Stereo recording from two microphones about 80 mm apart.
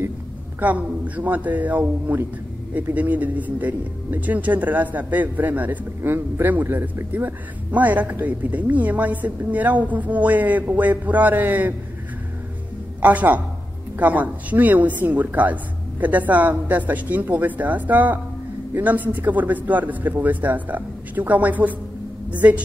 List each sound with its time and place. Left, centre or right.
0.6 s speech: centre
13.0 s speech: centre